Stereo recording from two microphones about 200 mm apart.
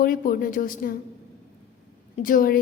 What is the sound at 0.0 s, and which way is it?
Speech, 45° left (ahead or behind).